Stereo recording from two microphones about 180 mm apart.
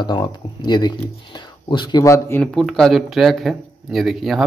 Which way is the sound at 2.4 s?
5° left (ahead or behind).